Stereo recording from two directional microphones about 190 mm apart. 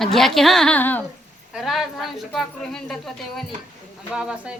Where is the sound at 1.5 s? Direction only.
Centre (ahead or behind).